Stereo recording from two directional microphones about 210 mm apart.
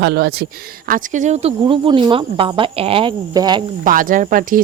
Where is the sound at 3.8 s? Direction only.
40° right (ahead or behind).